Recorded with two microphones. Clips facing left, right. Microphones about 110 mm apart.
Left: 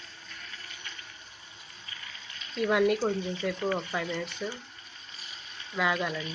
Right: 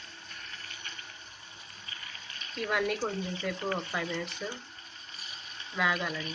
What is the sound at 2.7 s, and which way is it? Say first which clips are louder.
Speech: left 6 dB; 5° left (ahead or behind).